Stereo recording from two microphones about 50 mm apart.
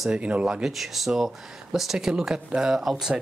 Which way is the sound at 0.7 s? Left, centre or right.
Centre.